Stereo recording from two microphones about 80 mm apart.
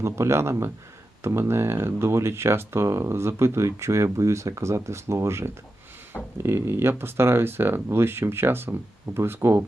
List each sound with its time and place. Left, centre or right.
0.0 s speech: right